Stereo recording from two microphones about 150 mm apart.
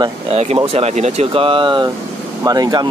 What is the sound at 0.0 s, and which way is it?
Speech, 40° right (ahead or behind).